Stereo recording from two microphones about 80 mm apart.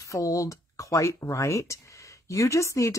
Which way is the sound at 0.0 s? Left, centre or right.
Left.